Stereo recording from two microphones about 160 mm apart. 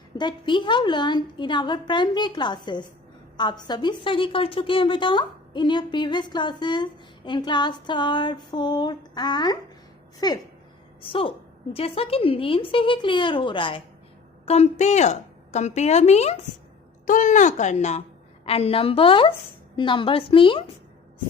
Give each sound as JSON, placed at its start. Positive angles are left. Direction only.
{"t": 0.2, "sound": "a woman's voice", "side_deg": 30}
{"t": 11.0, "sound": "a woman's voice", "side_deg": 35}
{"t": 14.4, "sound": "a woman's voice", "side_deg": 40}
{"t": 17.1, "sound": "a woman's voice", "side_deg": 55}